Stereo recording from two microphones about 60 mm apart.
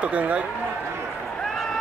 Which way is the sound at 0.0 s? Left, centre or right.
Right.